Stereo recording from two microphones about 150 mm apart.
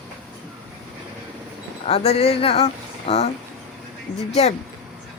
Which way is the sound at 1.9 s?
45° left (ahead or behind).